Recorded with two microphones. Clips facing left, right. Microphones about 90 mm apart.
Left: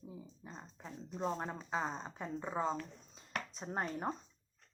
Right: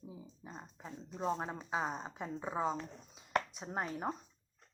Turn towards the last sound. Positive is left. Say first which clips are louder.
# even
turn(degrees=-5)  # may be behind; listen again after turning